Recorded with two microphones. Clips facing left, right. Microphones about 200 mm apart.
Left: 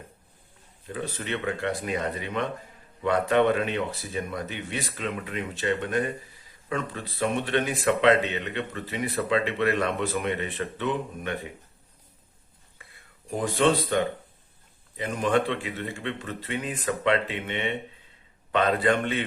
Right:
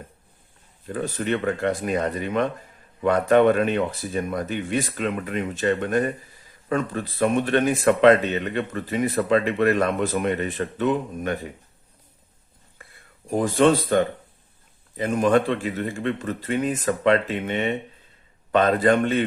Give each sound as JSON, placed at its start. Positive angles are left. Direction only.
{"t": 0.9, "sound": "speech", "side_deg": -45}
{"t": 13.3, "sound": "speech", "side_deg": -45}